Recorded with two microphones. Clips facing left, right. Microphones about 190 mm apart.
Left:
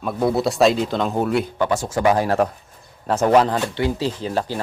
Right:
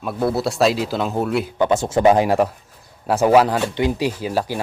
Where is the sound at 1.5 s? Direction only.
20° right (ahead or behind).